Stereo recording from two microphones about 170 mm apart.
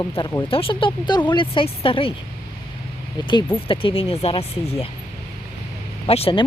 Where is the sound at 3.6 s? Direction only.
30° left (ahead or behind).